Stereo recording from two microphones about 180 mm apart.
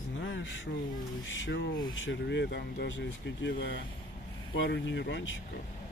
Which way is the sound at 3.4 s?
90° left.